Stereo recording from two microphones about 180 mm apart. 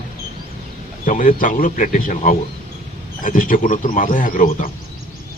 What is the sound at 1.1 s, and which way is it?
Speech, 45° left (ahead or behind).